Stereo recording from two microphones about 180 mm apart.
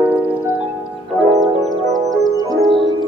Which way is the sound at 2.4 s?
25° right (ahead or behind).